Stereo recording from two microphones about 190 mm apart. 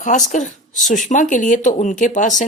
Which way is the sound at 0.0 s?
40° left (ahead or behind).